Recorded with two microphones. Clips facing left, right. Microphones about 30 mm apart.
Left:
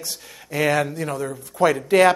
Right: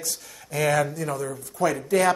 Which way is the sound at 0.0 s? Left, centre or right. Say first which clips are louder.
Left 1 dB; left.